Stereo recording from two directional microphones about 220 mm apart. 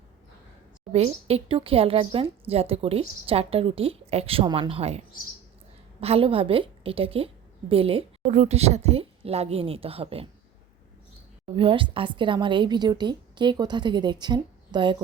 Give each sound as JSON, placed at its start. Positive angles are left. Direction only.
{"t": 0.9, "sound": "speech", "side_deg": -25}
{"t": 11.5, "sound": "speech", "side_deg": -25}